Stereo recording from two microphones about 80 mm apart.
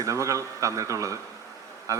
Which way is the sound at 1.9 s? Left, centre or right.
Right.